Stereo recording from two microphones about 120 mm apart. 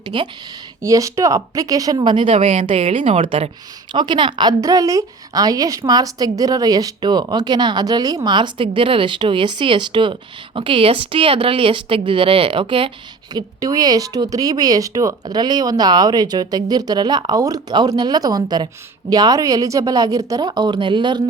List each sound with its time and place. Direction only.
0.0 s speech: 40° right (ahead or behind)
0.8 s speech: 25° right (ahead or behind); by 3.5 s 50° right (ahead or behind)
3.9 s speech: 40° right (ahead or behind)
13.3 s speech: 30° right (ahead or behind)